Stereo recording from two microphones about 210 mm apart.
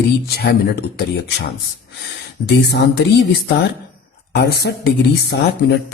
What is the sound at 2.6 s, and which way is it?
Speech, 50° left (ahead or behind).